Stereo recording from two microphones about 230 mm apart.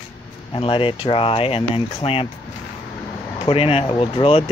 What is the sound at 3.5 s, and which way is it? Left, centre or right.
Speech, left.